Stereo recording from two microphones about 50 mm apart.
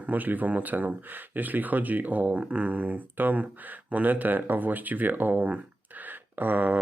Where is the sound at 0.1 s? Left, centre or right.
Right.